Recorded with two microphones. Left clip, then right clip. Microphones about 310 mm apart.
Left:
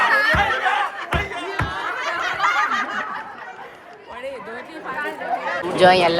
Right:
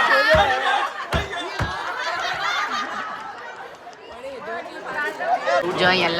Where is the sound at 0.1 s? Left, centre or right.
Centre.